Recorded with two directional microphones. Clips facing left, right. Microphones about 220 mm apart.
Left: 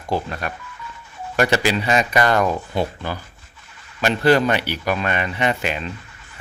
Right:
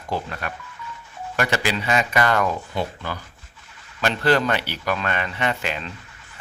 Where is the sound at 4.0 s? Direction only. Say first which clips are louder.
Left 4 dB; 10° left (ahead or behind).